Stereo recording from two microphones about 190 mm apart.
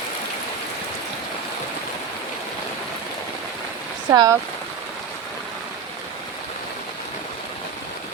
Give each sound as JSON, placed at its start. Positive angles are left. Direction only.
{"t": 4.1, "sound": "speech", "side_deg": -20}